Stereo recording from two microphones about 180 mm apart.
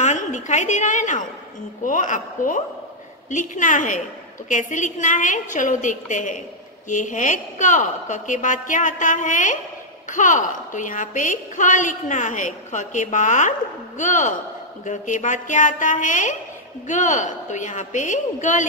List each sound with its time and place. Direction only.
0.0 s a woman's voice: 40° left (ahead or behind)